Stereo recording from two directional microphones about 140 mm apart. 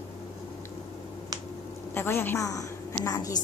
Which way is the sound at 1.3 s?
25° right (ahead or behind).